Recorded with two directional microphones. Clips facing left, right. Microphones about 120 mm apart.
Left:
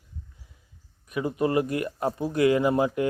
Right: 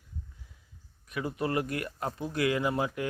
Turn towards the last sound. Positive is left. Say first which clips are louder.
# left 7 dB
turn(degrees=30)  # may be behind; listen again after turning